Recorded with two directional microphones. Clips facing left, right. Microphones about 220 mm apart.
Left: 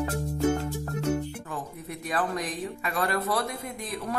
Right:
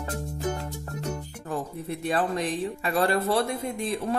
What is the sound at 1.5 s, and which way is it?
Speech, 30° right (ahead or behind).